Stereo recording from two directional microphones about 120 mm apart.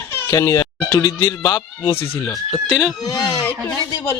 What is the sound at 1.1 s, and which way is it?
Speech, 40° left (ahead or behind).